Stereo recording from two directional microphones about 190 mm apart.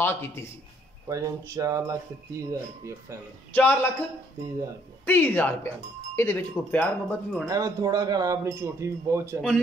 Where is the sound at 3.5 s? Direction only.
10° left (ahead or behind).